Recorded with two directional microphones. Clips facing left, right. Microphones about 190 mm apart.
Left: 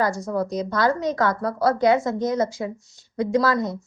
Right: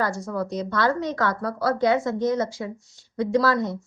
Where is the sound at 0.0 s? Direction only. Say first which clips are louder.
Left 3 dB; 40° left (ahead or behind).